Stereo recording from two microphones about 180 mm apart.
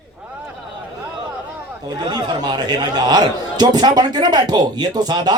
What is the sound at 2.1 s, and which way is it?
Speech, 25° right (ahead or behind).